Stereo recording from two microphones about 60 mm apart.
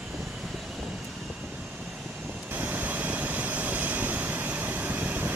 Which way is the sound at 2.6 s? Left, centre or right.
Right.